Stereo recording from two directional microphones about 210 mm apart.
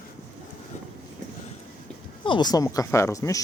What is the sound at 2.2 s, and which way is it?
Speech, 20° left (ahead or behind).